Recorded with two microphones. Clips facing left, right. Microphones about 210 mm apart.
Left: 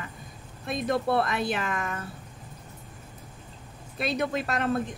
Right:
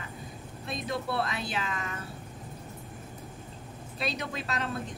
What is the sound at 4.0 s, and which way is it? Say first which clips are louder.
Speech: left 7 dB; 55° left (ahead or behind).